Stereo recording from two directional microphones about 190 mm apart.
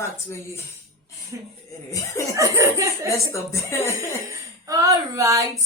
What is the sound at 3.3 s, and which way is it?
Speech, 15° left (ahead or behind).